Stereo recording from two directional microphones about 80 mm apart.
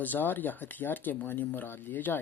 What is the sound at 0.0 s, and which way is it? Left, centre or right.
Speech, left.